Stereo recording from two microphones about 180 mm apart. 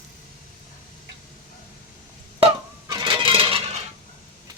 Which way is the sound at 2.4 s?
25° right (ahead or behind).